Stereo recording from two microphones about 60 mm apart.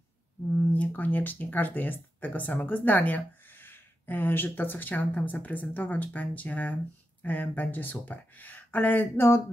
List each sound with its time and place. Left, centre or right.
0.6 s speech: left